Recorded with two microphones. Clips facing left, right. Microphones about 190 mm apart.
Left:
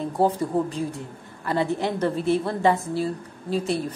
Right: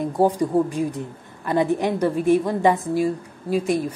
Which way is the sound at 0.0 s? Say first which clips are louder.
Right 3 dB; 15° right (ahead or behind).